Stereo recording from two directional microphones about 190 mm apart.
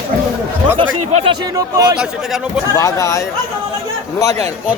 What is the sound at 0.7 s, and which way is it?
Speech, 30° right (ahead or behind).